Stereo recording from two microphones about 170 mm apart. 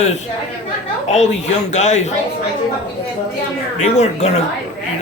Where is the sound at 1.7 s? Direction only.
45° left (ahead or behind).